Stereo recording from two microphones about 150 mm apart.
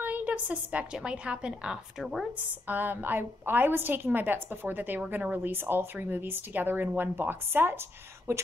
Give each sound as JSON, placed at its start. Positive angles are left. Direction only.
{"t": 0.0, "sound": "a woman's voice", "side_deg": -10}